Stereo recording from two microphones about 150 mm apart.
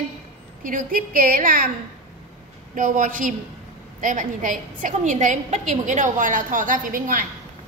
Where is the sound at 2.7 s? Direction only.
60° right (ahead or behind).